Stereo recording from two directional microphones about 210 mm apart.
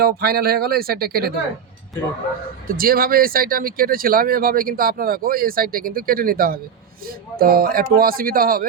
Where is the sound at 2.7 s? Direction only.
45° right (ahead or behind).